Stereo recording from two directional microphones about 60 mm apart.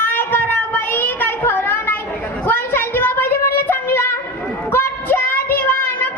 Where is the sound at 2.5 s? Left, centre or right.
Left.